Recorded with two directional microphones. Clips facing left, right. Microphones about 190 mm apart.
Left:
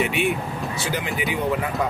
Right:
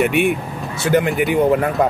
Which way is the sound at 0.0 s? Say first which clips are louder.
Right 6 dB; 55° right (ahead or behind).